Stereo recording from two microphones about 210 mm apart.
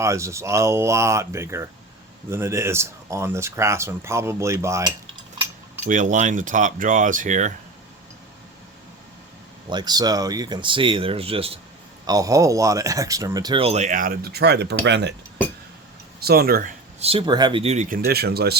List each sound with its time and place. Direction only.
0.0 s speech: 15° right (ahead or behind)
5.8 s speech: 35° right (ahead or behind)
9.6 s speech: 20° right (ahead or behind)
12.0 s speech: 15° right (ahead or behind); by 15.1 s 55° right (ahead or behind)
16.2 s speech: 45° right (ahead or behind)
17.0 s speech: 25° right (ahead or behind); by 18.5 s 50° right (ahead or behind)